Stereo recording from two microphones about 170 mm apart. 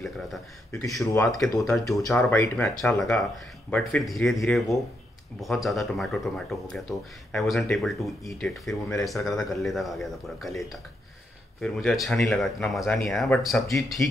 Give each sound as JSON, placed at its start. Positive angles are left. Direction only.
{"t": 0.7, "sound": "speech", "side_deg": 15}
{"t": 1.3, "sound": "speech", "side_deg": 0}
{"t": 8.6, "sound": "speech", "side_deg": 15}
{"t": 9.0, "sound": "speech", "side_deg": 0}
{"t": 11.6, "sound": "speech", "side_deg": 5}